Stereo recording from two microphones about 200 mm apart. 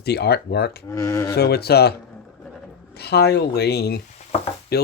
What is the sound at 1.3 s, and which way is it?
Speech, 55° left (ahead or behind).